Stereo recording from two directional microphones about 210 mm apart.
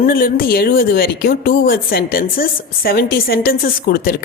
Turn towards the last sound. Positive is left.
turn(degrees=45)  # may be behind; listen again after turning